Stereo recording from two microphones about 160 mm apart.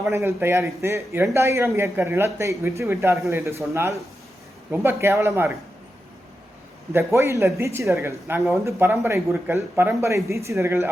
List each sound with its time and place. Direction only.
0.1 s speech: 15° right (ahead or behind)
6.9 s speech: 20° right (ahead or behind)